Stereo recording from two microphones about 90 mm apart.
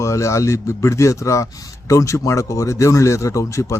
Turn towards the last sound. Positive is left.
turn(degrees=35)  # may be behind; listen again after turning